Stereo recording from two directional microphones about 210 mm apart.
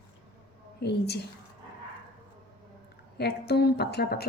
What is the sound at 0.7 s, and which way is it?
Speech, 50° left (ahead or behind).